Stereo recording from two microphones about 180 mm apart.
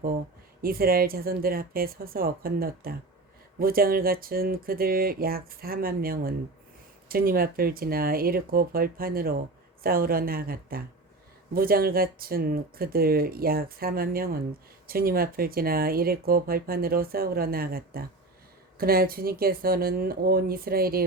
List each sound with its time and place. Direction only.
0.6 s speech: 55° right (ahead or behind)